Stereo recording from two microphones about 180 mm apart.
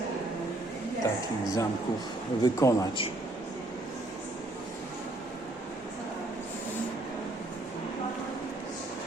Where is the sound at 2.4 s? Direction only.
20° left (ahead or behind).